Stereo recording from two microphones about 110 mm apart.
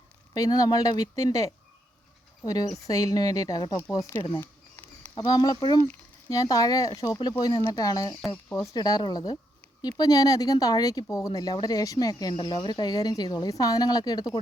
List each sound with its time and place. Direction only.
0.3 s speech: 35° left (ahead or behind)
4.4 s a sound: 20° left (ahead or behind)
5.1 s speech: 40° left (ahead or behind)
7.2 s speech: 40° left (ahead or behind)
12.3 s speech: 45° left (ahead or behind)